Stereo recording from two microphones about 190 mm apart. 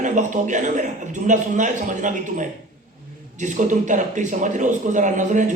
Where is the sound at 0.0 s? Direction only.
40° right (ahead or behind).